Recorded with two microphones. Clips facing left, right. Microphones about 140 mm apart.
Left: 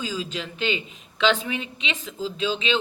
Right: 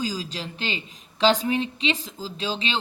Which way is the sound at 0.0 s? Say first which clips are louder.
Even; 35° right (ahead or behind).